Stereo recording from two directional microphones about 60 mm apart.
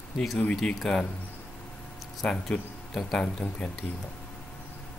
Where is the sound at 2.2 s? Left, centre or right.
Centre.